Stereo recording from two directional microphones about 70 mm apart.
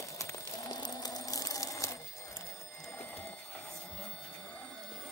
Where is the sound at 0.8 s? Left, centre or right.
Left.